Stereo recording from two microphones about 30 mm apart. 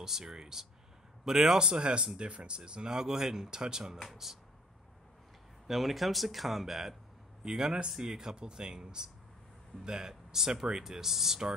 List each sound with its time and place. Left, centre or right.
0.0 s speech: centre
1.7 s speech: right
2.9 s speech: centre
4.0 s speech: centre
5.7 s speech: centre